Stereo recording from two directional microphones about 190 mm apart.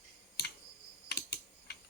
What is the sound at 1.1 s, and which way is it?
Typing, 60° left (ahead or behind).